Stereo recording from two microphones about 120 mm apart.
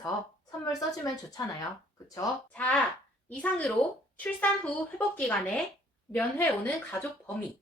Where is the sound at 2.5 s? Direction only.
15° left (ahead or behind).